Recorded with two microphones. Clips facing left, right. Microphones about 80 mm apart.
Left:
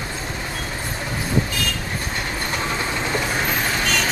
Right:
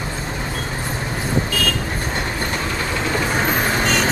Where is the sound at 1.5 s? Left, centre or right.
Right.